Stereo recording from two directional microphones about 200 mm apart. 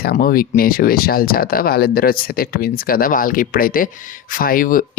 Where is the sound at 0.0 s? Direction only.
50° left (ahead or behind).